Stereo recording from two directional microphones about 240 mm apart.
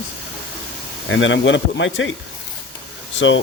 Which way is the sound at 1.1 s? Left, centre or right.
Left.